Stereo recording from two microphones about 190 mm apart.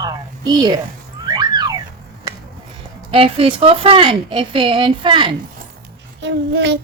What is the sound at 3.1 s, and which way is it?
Speech, 30° right (ahead or behind).